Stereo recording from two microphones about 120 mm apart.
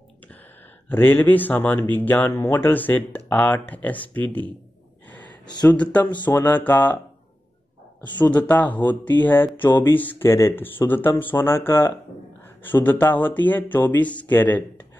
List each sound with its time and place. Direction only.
0.8 s speech: 15° left (ahead or behind)
5.7 s speech: 15° left (ahead or behind)
8.2 s speech: 15° left (ahead or behind)